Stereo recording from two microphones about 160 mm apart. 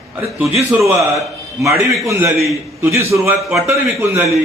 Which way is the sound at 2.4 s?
15° right (ahead or behind).